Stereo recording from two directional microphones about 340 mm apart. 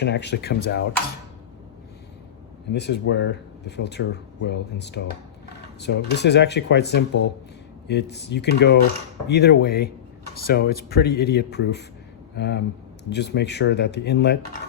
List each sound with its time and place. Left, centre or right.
0.0 s speech: left
2.7 s speech: left